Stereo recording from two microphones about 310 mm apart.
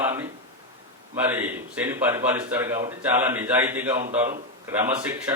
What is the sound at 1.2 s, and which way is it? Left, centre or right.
A man's voice, centre.